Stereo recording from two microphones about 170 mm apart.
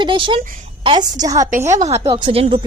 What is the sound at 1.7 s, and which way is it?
Speech, 40° right (ahead or behind).